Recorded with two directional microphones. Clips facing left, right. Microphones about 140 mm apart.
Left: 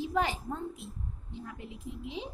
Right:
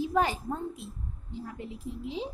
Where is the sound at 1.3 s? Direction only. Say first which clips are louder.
Right 5 dB; 35° right (ahead or behind).